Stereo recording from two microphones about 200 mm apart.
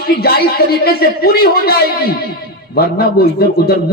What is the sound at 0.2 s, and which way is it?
A man's voice, 50° left (ahead or behind).